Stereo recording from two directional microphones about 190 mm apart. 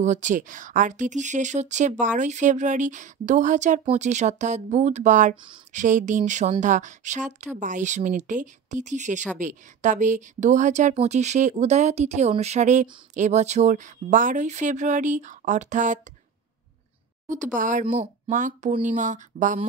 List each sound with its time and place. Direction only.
0.0 s speech: 40° right (ahead or behind)
17.3 s speech: 45° right (ahead or behind)